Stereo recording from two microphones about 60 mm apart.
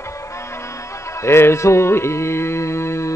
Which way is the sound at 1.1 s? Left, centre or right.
Left.